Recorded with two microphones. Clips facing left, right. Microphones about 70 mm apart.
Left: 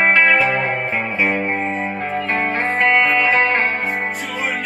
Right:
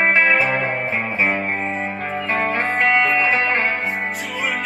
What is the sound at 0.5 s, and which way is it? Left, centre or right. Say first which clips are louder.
Music: left 1 dB; left.